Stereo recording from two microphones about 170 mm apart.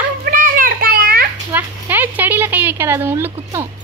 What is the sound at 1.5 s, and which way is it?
Speech, 10° right (ahead or behind).